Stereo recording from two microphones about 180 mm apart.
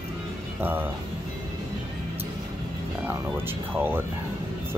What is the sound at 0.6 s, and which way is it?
Speech, 10° right (ahead or behind).